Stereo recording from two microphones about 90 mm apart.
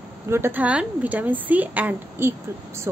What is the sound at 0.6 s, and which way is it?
A woman's voice, 15° right (ahead or behind).